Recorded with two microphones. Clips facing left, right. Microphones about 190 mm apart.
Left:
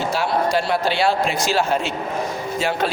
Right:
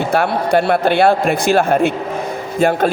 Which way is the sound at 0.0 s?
60° right (ahead or behind).